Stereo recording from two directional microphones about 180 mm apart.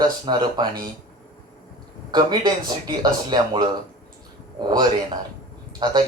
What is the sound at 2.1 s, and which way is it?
Speech, 25° right (ahead or behind).